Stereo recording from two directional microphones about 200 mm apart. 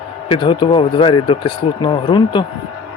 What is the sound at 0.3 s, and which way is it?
Speech, 25° left (ahead or behind).